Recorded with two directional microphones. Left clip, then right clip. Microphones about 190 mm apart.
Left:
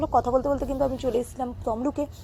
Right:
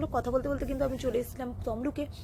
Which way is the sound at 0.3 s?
20° right (ahead or behind).